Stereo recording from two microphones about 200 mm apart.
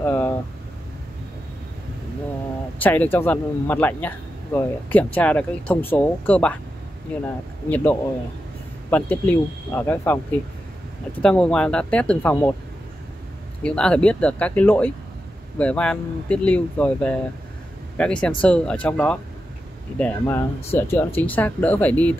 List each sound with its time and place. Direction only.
0.0 s vehicle: 10° left (ahead or behind)
2.8 s speech: 10° left (ahead or behind)
7.7 s speech: 10° left (ahead or behind)
11.2 s speech: 5° left (ahead or behind)
13.6 s speech: 5° left (ahead or behind)